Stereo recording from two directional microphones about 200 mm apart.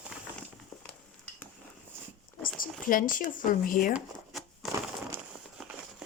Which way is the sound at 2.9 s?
45° left (ahead or behind).